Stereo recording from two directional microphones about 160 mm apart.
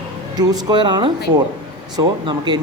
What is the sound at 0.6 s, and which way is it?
Speech, 25° right (ahead or behind).